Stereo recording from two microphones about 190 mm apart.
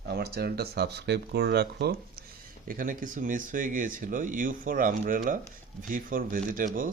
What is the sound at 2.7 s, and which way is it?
Speech, 45° right (ahead or behind).